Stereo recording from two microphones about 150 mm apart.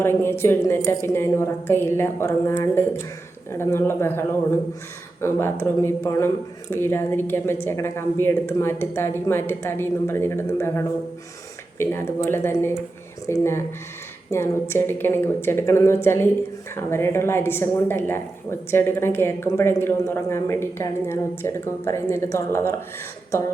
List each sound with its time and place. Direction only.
0.0 s speech: 15° left (ahead or behind)